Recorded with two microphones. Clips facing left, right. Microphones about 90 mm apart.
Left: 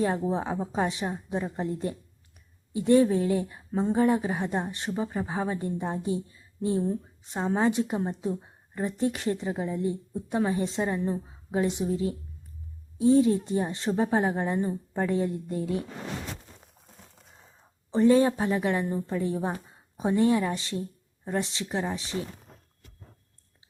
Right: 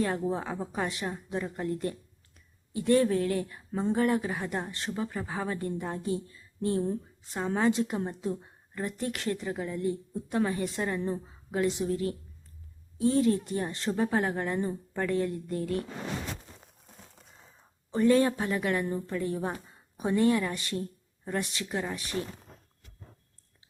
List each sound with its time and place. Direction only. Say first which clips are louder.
0.0 s a woman's voice: left 3 dB; 20° left (ahead or behind)
3.7 s speech: left 3 dB; 5° left (ahead or behind)
3.9 s a woman's voice: left 3 dB; 20° left (ahead or behind)
17.9 s a woman's voice: left 3 dB; 25° left (ahead or behind)